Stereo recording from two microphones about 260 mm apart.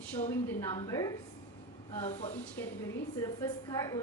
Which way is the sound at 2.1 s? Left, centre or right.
Left.